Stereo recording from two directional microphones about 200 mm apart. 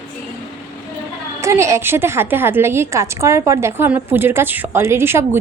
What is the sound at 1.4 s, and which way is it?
A woman's voice, 15° right (ahead or behind).